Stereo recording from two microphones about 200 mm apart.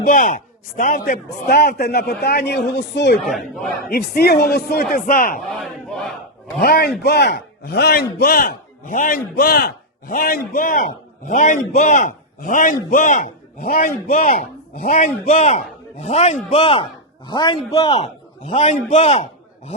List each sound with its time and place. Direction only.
0.0 s a man's voice: 40° left (ahead or behind)
1.3 s a man's voice: 50° left (ahead or behind)
3.2 s speech: centre (ahead or behind)
3.8 s a man's voice: 50° left (ahead or behind)
5.5 s speech: centre (ahead or behind)
6.6 s a man's voice: 50° left (ahead or behind)
14.9 s a man's voice: 30° left (ahead or behind)
17.9 s a man's voice: 35° left (ahead or behind)